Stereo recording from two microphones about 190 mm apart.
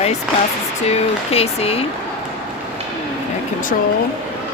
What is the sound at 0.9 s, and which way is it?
Speech, 30° left (ahead or behind).